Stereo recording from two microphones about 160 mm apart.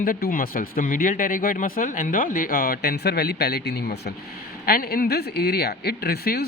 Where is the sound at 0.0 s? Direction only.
65° left (ahead or behind); by 4.1 s 85° left.